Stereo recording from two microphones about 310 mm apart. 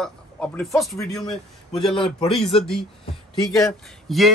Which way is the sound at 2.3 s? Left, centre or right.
Centre.